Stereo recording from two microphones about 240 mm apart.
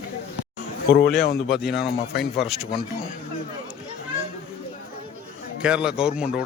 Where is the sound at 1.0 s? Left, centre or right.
Left.